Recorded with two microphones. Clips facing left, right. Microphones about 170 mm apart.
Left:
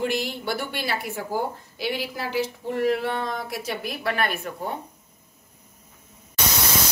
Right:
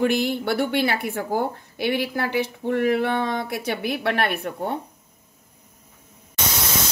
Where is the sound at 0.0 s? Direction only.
60° right (ahead or behind).